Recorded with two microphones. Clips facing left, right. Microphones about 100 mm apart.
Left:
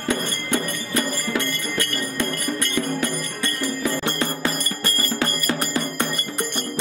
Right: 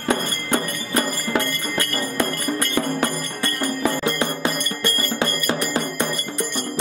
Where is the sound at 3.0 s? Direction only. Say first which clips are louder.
Right 2 dB; 55° right (ahead or behind).